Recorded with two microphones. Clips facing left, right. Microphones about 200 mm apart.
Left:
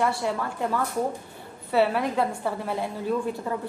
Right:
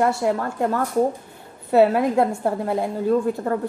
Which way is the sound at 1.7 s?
45° right (ahead or behind).